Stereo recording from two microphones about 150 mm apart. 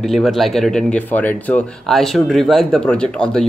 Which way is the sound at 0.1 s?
Centre (ahead or behind).